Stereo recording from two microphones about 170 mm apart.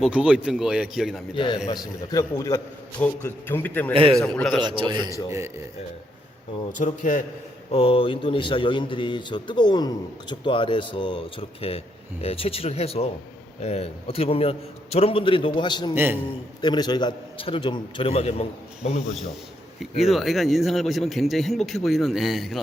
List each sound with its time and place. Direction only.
0.0 s speech: 5° right (ahead or behind)
1.4 s a man's voice: 30° left (ahead or behind); by 4.6 s 5° left (ahead or behind)
4.6 s a man's voice: 30° right (ahead or behind)
6.7 s a man's voice: 50° left (ahead or behind)
7.7 s a man's voice: 35° left (ahead or behind)
19.8 s speech: centre (ahead or behind)